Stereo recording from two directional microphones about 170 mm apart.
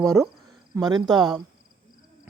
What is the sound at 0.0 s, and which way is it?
Speech, 20° right (ahead or behind).